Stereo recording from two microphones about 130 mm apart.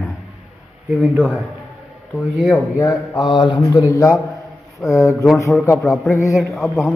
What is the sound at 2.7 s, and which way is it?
Speech, 35° left (ahead or behind).